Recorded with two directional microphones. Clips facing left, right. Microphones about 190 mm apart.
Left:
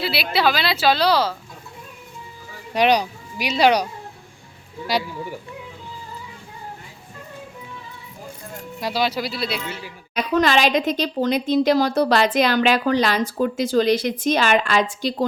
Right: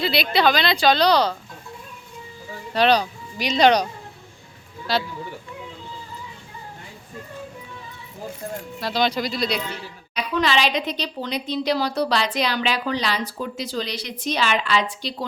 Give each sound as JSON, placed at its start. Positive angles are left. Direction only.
{"t": 0.0, "sound": "a woman's voice", "side_deg": 5}
{"t": 2.7, "sound": "speech", "side_deg": 15}
{"t": 8.8, "sound": "speech", "side_deg": 10}
{"t": 10.2, "sound": "a woman's voice", "side_deg": 50}